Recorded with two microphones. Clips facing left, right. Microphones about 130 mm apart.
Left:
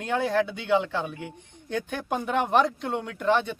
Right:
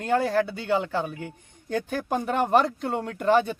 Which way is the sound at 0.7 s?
Centre (ahead or behind).